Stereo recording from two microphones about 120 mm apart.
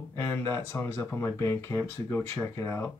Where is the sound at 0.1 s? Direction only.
25° left (ahead or behind).